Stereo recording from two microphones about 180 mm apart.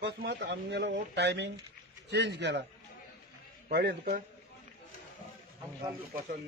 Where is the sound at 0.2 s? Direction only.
70° right (ahead or behind).